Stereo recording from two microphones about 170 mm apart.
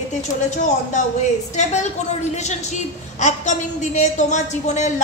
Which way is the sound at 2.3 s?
45° left (ahead or behind).